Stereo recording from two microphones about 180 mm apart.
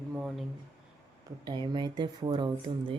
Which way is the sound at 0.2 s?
Centre (ahead or behind).